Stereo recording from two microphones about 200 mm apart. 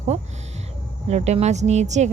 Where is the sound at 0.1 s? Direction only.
35° right (ahead or behind).